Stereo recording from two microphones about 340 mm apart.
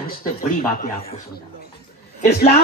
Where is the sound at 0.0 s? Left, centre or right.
Left.